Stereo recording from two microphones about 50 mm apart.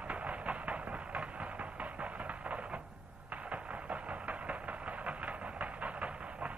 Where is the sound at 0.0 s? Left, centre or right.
Right.